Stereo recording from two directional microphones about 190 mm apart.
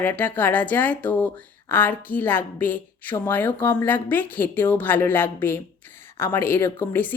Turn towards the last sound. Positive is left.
turn(degrees=10)  # may be behind; listen again after turning